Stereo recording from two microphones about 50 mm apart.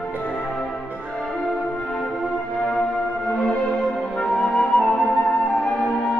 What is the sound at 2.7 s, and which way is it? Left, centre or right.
Music, centre.